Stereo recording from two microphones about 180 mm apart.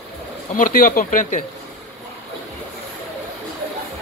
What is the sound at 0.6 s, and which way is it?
Speech, 50° left (ahead or behind).